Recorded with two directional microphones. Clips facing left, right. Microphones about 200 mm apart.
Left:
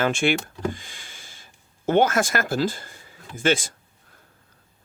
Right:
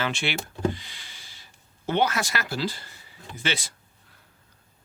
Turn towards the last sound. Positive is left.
turn(degrees=50)  # may be behind; listen again after turning